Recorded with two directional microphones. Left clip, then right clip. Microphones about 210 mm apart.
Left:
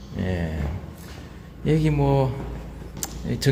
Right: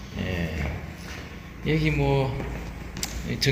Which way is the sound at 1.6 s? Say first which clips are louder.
Left 2 dB; 40° left (ahead or behind).